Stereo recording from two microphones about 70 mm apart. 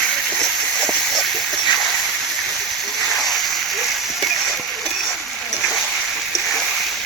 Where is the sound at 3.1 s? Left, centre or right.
Centre.